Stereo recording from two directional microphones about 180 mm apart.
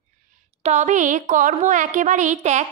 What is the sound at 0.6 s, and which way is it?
A woman's voice, 40° right (ahead or behind).